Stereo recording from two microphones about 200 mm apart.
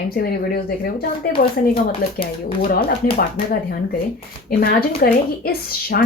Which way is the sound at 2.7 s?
50° left (ahead or behind).